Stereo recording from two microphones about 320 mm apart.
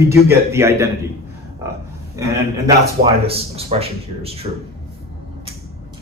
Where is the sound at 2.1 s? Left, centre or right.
Centre.